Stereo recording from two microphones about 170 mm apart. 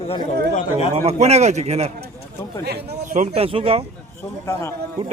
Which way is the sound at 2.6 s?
70° right (ahead or behind).